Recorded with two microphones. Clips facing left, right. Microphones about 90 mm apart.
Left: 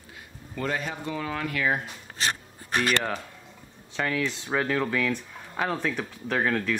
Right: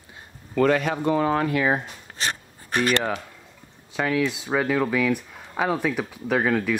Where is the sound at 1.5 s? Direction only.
25° right (ahead or behind).